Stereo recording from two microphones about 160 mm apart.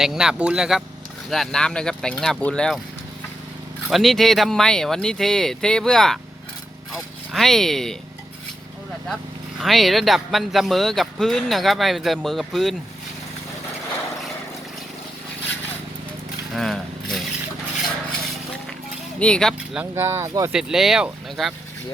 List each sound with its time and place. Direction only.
0.0 s speech: 5° right (ahead or behind)
3.8 s speech: centre (ahead or behind)
9.6 s speech: centre (ahead or behind)
16.6 s a sound: centre (ahead or behind)
19.2 s speech: 5° left (ahead or behind)
19.8 s speech: 15° right (ahead or behind)
20.5 s speech: 5° right (ahead or behind)